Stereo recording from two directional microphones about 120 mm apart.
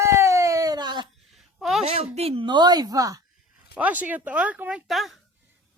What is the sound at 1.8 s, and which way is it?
Speech, 60° right (ahead or behind).